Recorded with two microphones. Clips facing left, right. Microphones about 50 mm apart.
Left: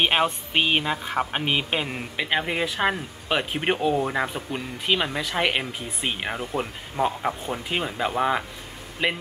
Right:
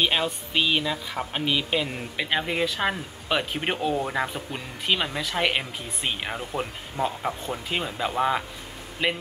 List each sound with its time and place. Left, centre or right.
0.0 s speech: left
2.1 s speech: centre